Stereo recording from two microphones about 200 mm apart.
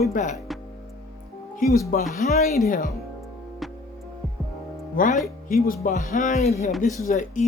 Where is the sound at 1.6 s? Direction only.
40° left (ahead or behind).